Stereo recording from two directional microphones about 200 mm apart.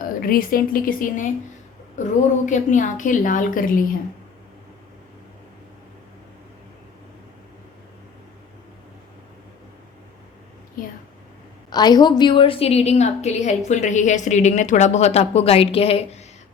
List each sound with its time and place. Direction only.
0.0 s a woman's voice: 45° left (ahead or behind)
2.5 s speech: 40° left (ahead or behind)
11.7 s a woman's voice: 20° left (ahead or behind)